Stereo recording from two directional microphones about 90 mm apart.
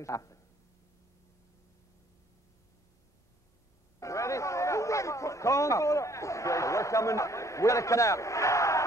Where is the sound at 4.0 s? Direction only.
35° left (ahead or behind).